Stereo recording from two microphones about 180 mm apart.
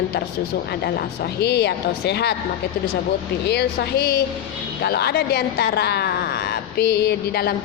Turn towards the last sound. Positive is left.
turn(degrees=65)  # may be behind; listen again after turning